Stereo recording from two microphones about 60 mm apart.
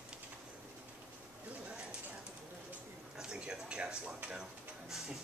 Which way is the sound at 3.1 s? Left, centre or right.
Centre.